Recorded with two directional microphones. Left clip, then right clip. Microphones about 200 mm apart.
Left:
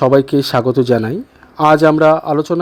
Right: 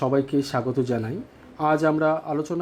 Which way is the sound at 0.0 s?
45° left (ahead or behind).